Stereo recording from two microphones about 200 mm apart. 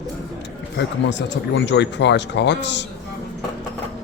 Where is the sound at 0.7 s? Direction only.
60° left (ahead or behind).